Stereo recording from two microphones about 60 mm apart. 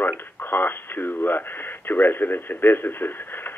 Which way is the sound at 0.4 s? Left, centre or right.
Left.